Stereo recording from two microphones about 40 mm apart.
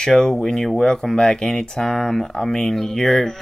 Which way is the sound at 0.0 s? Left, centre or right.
Centre.